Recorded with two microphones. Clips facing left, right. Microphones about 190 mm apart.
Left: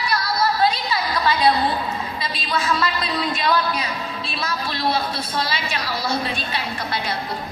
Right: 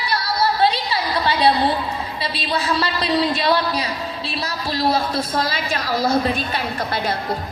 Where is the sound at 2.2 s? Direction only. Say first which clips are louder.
Right 3 dB; 30° right (ahead or behind); by 7.1 s 45° right (ahead or behind).